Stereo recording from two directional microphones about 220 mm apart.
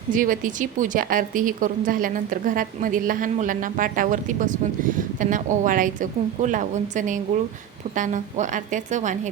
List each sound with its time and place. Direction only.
0.1 s a woman's voice: 40° right (ahead or behind)